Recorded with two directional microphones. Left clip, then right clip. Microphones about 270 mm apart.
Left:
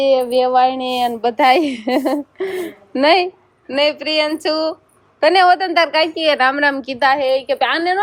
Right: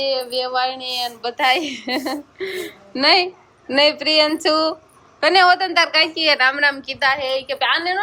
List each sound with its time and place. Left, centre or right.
0.1 s a woman's voice: left